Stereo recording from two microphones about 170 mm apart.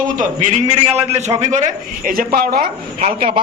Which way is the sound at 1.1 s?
40° right (ahead or behind).